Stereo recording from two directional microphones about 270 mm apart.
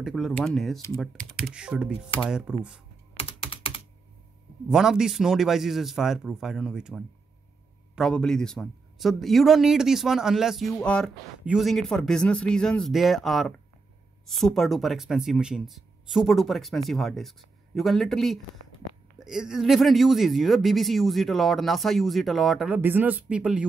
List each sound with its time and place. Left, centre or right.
0.0 s speech: centre
3.2 s typing: centre
4.6 s speech: centre
18.6 s whispering: left
19.1 s speech: centre